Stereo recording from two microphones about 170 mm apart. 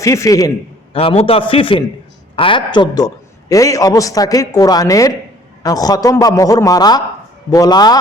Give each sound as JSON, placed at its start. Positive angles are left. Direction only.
{"t": 0.0, "sound": "speech", "side_deg": 20}
{"t": 0.9, "sound": "a man's voice", "side_deg": 35}